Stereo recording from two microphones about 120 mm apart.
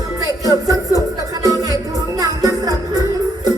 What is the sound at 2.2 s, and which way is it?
Music, 30° right (ahead or behind).